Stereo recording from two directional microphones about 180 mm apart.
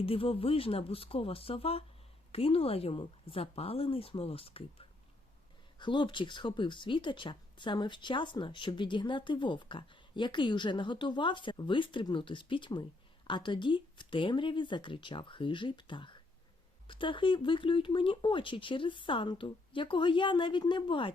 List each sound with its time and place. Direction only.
0.0 s a woman's voice: 30° left (ahead or behind)